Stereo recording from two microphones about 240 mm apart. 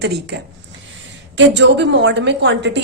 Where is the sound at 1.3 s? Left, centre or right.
Right.